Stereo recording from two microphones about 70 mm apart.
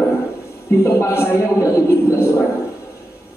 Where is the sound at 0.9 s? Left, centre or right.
Left.